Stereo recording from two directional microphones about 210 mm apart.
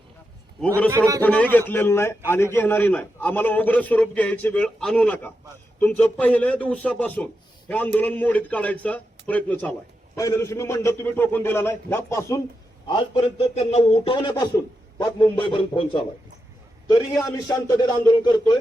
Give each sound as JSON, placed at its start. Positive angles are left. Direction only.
{"t": 0.9, "sound": "a man's voice", "side_deg": -15}
{"t": 1.2, "sound": "a man's voice", "side_deg": 5}
{"t": 12.9, "sound": "speech", "side_deg": 25}